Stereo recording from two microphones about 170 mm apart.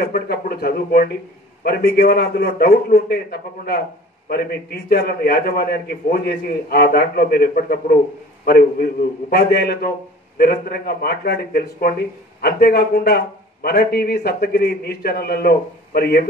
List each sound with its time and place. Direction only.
0.0 s a man's voice: 65° left (ahead or behind)
8.5 s a man's voice: 65° left (ahead or behind)